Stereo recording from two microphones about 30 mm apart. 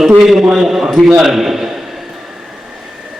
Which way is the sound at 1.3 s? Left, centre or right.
Centre.